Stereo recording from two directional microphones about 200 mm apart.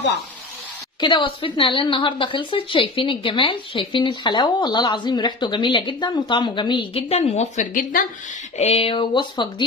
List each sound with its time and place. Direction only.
1.0 s a woman's voice: 25° left (ahead or behind); by 8.1 s 40° left (ahead or behind)
8.5 s a woman's voice: 30° left (ahead or behind)